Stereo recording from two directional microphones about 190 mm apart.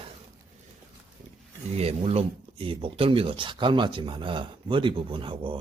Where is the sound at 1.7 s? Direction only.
35° right (ahead or behind).